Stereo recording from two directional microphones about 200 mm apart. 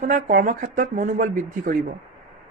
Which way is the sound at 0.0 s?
40° right (ahead or behind).